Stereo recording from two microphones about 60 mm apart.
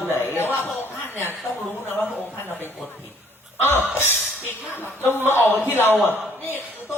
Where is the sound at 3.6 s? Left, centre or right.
Left.